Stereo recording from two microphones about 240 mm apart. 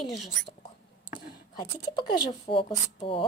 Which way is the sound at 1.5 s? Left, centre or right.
Centre.